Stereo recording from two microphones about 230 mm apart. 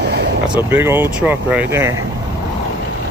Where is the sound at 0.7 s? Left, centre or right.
Centre.